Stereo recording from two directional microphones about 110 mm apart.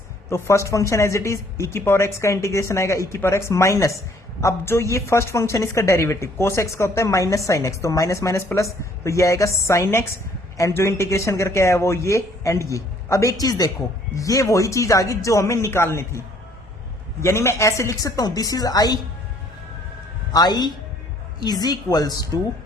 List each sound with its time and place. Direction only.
0.3 s a woman's voice: 25° left (ahead or behind)
20.3 s a woman's voice: 40° left (ahead or behind)